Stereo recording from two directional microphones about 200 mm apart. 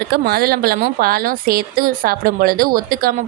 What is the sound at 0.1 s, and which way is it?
A woman's voice, 50° right (ahead or behind).